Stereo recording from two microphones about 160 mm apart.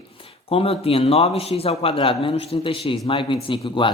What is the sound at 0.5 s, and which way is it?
Speech, 35° left (ahead or behind).